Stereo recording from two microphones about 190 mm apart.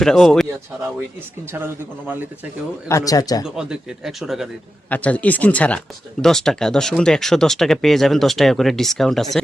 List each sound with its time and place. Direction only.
0.0 s speech: centre (ahead or behind)
1.5 s speech: 10° right (ahead or behind)
2.9 s speech: 20° left (ahead or behind)
3.4 s speech: 5° right (ahead or behind)